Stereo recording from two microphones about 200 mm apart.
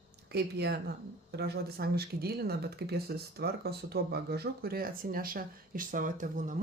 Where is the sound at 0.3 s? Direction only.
55° right (ahead or behind).